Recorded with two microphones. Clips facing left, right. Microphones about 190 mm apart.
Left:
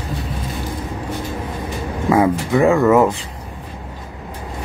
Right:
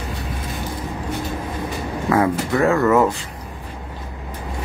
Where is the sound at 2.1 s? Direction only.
15° left (ahead or behind).